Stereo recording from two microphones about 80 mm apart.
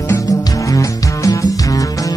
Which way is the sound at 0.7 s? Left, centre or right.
Left.